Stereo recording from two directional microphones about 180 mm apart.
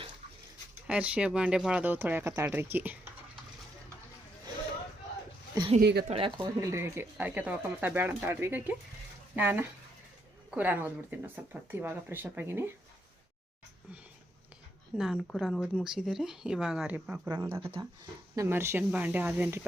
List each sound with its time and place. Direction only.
0.9 s speech: 5° right (ahead or behind)
5.8 s speech: 65° right (ahead or behind)
6.1 s speech: 30° right (ahead or behind); by 12.7 s 10° right (ahead or behind)
14.9 s speech: centre (ahead or behind)
17.2 s speech: 25° right (ahead or behind)
18.3 s speech: 15° right (ahead or behind)